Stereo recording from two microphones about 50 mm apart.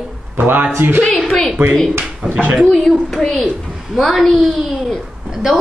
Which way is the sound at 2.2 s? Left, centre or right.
Centre.